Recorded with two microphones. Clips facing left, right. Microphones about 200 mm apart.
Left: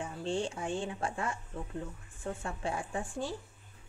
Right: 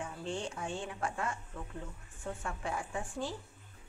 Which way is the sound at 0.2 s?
30° left (ahead or behind).